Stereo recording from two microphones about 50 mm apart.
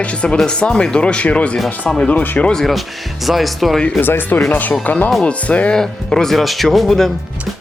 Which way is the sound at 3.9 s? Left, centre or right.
Left.